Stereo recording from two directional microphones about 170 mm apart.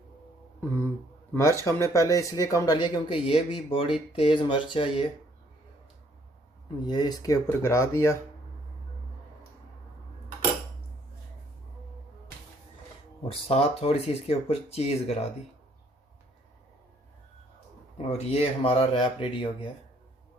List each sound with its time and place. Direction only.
1.3 s speech: 15° left (ahead or behind)
6.8 s speech: 25° left (ahead or behind)
13.2 s speech: 35° left (ahead or behind)
17.9 s speech: 35° left (ahead or behind)